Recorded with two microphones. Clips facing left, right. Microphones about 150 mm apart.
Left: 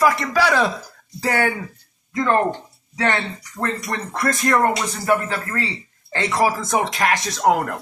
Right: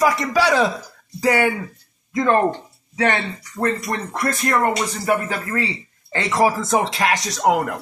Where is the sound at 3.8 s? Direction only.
15° right (ahead or behind).